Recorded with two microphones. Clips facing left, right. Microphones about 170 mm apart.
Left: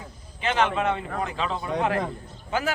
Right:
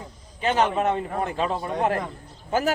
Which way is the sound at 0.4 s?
40° right (ahead or behind).